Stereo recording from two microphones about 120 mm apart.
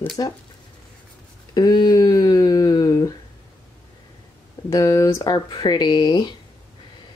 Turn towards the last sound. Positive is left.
turn(degrees=40)  # may be behind; listen again after turning